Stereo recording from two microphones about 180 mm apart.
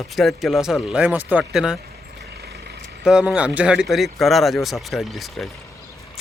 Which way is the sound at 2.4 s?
65° right (ahead or behind).